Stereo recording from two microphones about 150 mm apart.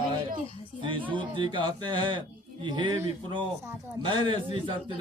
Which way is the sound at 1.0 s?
35° right (ahead or behind).